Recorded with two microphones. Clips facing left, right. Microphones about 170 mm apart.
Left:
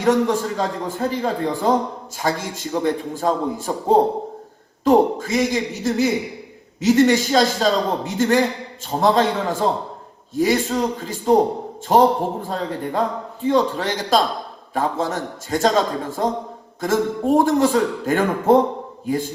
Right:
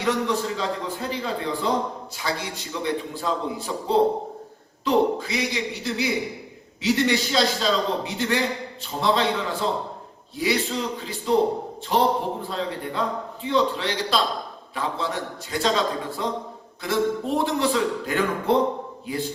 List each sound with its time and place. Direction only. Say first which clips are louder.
0.0 s a man's voice: left 6 dB; 45° left (ahead or behind)